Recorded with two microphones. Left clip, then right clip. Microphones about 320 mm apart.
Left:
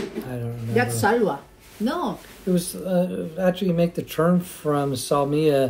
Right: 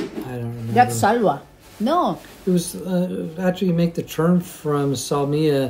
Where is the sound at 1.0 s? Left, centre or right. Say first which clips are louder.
Right 3 dB; centre.